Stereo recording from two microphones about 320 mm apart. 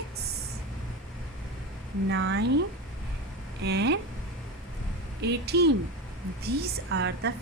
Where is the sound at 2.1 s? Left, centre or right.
Right.